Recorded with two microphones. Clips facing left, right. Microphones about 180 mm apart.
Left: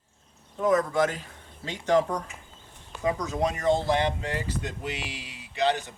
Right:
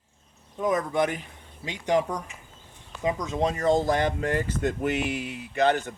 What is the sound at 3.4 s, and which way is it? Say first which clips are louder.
Speech: right 2 dB; 35° right (ahead or behind).